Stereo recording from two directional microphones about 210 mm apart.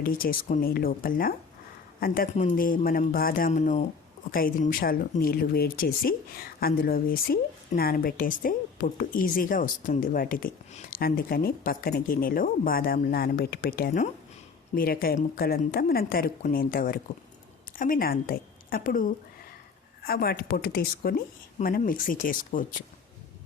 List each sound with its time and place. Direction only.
0.0 s a woman's voice: 45° left (ahead or behind)